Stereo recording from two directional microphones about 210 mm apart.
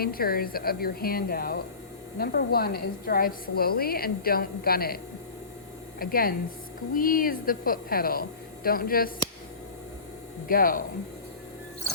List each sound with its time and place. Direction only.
0.0 s a woman's voice: 45° left (ahead or behind)
6.0 s a woman's voice: 45° left (ahead or behind)
10.5 s a woman's voice: 45° left (ahead or behind)